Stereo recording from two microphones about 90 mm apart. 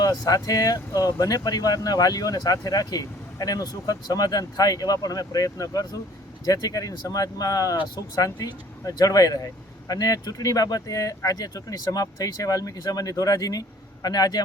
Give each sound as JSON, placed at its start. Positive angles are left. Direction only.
{"t": 0.0, "sound": "speech", "side_deg": 45}